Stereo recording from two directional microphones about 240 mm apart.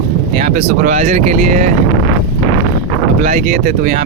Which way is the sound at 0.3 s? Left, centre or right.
Right.